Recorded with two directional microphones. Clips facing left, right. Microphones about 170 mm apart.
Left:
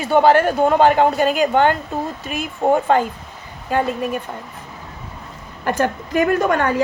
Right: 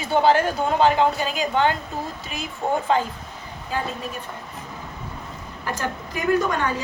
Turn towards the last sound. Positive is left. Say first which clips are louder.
# left 5 dB
turn(degrees=60)  # may be behind; listen again after turning